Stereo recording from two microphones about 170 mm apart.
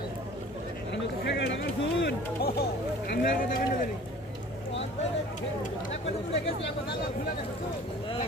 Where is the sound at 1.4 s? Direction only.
85° left.